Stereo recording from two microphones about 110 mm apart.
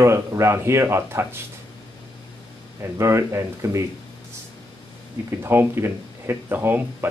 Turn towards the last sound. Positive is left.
turn(degrees=-20)  # may be behind; listen again after turning